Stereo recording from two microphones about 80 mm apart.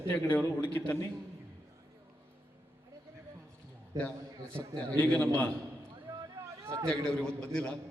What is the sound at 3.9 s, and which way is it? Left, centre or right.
Speech, right.